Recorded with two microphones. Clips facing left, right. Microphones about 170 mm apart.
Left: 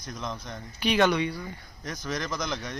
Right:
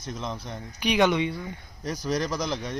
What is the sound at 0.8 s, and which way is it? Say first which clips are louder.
Speech: right 1 dB; 15° right (ahead or behind).